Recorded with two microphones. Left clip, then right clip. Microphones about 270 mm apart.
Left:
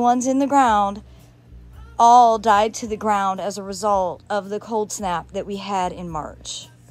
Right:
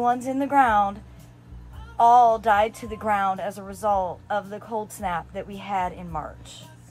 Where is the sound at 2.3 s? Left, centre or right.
Centre.